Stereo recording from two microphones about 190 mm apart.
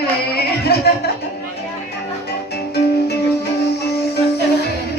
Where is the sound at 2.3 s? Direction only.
55° left (ahead or behind).